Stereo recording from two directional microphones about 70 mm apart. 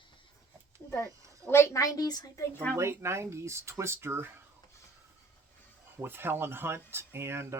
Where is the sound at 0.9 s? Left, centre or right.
Left.